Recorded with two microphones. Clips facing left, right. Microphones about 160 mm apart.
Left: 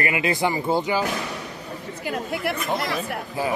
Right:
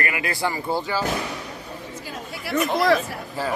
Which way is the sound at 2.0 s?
60° left (ahead or behind).